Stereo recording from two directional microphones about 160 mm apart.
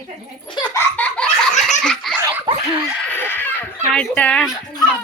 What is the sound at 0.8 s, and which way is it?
Laughter, 10° left (ahead or behind).